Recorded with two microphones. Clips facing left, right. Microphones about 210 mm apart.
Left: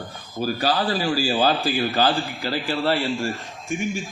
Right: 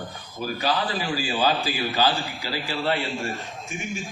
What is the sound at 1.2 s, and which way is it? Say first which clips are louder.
Speech: left 5 dB; 35° left (ahead or behind).